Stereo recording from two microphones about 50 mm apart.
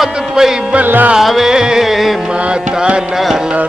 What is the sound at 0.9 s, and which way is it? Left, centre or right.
Music, right.